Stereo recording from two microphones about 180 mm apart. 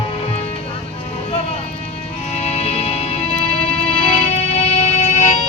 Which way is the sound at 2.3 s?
35° left (ahead or behind).